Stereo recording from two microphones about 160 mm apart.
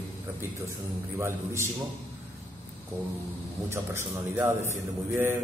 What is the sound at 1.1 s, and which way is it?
Speech, 15° right (ahead or behind).